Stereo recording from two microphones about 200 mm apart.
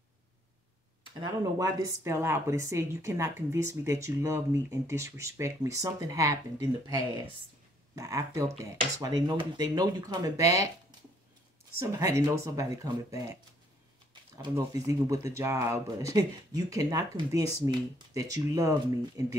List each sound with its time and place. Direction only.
1.2 s a woman's voice: 20° right (ahead or behind)
11.8 s a woman's voice: 15° right (ahead or behind)
14.3 s a woman's voice: 20° right (ahead or behind)